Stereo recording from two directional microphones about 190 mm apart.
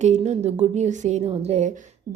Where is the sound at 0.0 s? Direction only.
35° right (ahead or behind).